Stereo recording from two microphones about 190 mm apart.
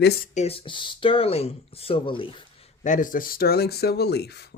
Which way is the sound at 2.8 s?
40° left (ahead or behind).